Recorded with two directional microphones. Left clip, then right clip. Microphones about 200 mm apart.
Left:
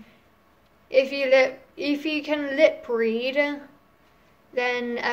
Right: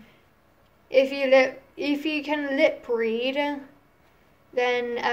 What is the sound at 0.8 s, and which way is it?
A woman's voice, centre (ahead or behind).